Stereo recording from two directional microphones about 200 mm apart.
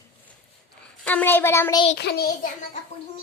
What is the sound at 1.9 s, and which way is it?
Speech, 55° left (ahead or behind).